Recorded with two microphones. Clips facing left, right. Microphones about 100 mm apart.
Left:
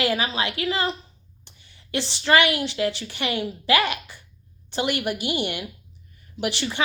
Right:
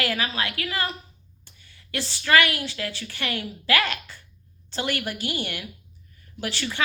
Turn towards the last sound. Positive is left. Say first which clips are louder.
# left 4 dB
turn(degrees=20)  # may be behind; listen again after turning